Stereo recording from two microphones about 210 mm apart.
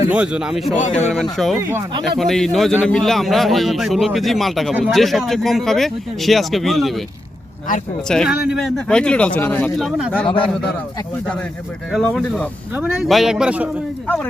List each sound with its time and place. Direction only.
0.1 s a man's voice: 5° right (ahead or behind)
0.8 s speech: 35° left (ahead or behind)
1.1 s a man's voice: centre (ahead or behind)
1.5 s speech: 10° right (ahead or behind)
2.1 s a man's voice: centre (ahead or behind)
8.0 s a man's voice: centre (ahead or behind)
11.9 s a man's voice: centre (ahead or behind)